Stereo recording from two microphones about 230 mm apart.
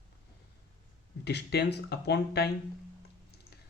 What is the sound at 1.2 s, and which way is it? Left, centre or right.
Speech, left.